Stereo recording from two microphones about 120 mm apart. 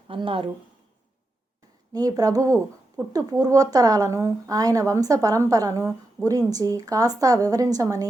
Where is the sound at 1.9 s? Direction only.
30° right (ahead or behind).